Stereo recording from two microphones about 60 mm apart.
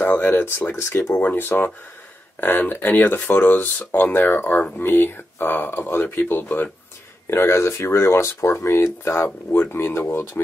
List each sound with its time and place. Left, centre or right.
0.0 s speech: left
1.1 s speech: left
7.2 s speech: left